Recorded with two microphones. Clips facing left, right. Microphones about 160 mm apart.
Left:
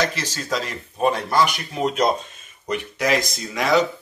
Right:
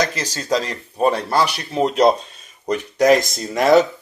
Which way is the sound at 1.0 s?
35° right (ahead or behind).